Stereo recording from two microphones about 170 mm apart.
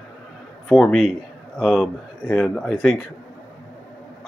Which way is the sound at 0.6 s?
Centre (ahead or behind).